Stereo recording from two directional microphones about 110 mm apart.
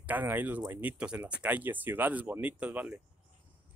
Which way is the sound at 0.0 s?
15° right (ahead or behind).